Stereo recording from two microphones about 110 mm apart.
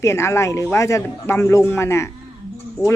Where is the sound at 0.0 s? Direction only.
25° left (ahead or behind).